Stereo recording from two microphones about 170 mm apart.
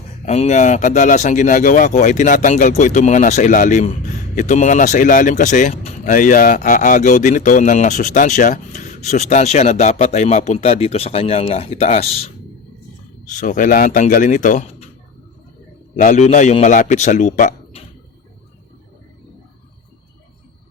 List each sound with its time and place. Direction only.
0.3 s speech: 40° left (ahead or behind)
16.0 s speech: 45° left (ahead or behind)